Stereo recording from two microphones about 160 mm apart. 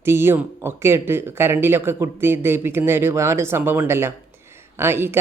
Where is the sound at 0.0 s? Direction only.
15° right (ahead or behind).